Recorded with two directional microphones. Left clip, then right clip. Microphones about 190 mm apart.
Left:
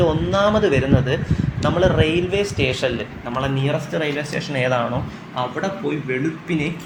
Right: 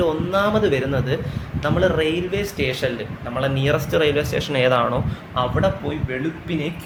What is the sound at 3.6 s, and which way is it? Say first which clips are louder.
Speech: right 4 dB; 20° right (ahead or behind).